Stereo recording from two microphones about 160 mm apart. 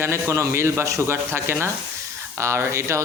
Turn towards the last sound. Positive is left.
turn(degrees=-20)  # may be behind; listen again after turning